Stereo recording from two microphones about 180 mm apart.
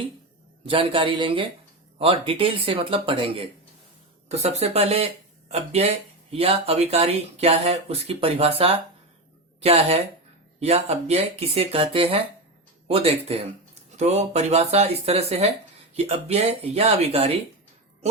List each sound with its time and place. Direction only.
0.6 s a man's voice: 30° right (ahead or behind)